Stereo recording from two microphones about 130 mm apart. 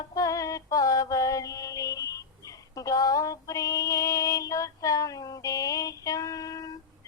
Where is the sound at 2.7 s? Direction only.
25° left (ahead or behind).